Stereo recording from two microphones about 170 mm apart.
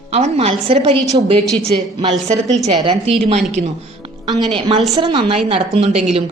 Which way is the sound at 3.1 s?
35° right (ahead or behind).